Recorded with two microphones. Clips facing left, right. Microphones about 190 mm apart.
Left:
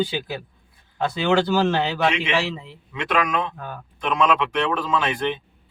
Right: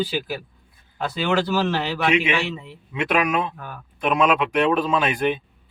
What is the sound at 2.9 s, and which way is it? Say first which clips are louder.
Speech: right 2 dB; 10° right (ahead or behind).